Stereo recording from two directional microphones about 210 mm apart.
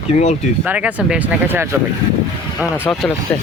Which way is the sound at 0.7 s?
5° right (ahead or behind).